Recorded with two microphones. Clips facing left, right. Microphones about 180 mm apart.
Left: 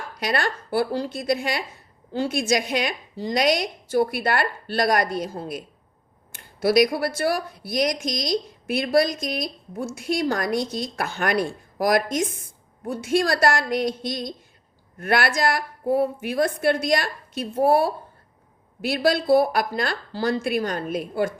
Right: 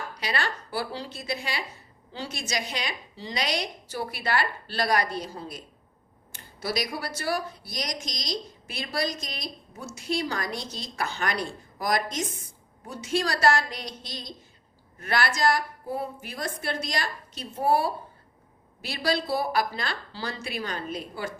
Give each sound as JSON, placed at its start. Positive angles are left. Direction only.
{"t": 0.2, "sound": "a woman's voice", "side_deg": 50}